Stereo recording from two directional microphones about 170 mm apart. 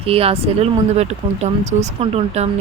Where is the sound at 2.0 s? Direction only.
35° right (ahead or behind).